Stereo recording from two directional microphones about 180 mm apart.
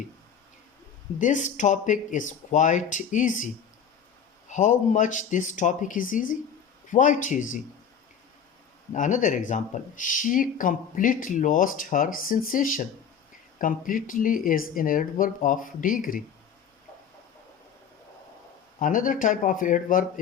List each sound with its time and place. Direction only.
1.2 s speech: 45° left (ahead or behind)
8.9 s speech: 45° left (ahead or behind)
18.8 s speech: 45° left (ahead or behind)